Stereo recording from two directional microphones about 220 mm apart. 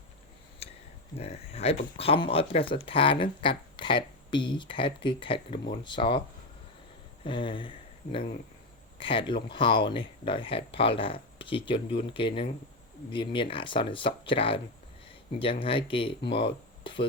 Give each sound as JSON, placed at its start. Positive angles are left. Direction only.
{"t": 0.6, "sound": "a sound", "side_deg": 30}
{"t": 1.2, "sound": "speech", "side_deg": 30}
{"t": 7.3, "sound": "speech", "side_deg": 20}
{"t": 9.0, "sound": "speech", "side_deg": 25}